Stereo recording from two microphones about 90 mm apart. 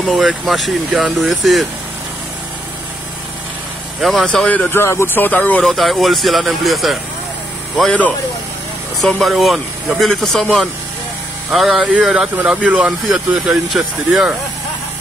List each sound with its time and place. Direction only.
0.0 s speech: 5° right (ahead or behind)
4.0 s speech: centre (ahead or behind)
4.5 s speech: 20° left (ahead or behind)
5.6 s speech: centre (ahead or behind)
9.0 s speech: centre (ahead or behind)
13.1 s speech: centre (ahead or behind)